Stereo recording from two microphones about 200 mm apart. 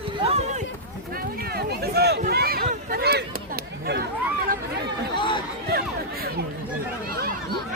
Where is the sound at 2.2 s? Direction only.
50° right (ahead or behind).